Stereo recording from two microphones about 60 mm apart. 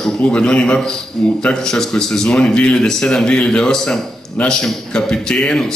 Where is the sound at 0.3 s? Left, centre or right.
Centre.